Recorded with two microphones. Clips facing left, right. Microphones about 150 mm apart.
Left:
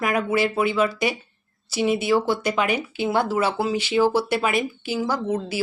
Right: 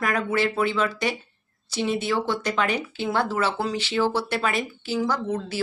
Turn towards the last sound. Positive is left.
turn(degrees=10)  # may be behind; listen again after turning